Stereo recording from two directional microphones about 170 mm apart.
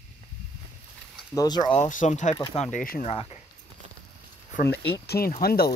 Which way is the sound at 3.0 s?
40° left (ahead or behind).